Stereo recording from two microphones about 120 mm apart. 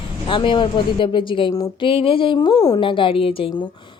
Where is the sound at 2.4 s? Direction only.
30° left (ahead or behind).